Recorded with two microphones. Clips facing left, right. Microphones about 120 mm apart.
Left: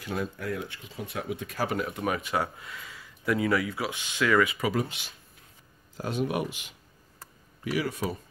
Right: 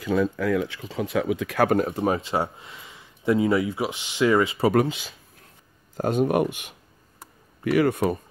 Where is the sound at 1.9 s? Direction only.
30° right (ahead or behind).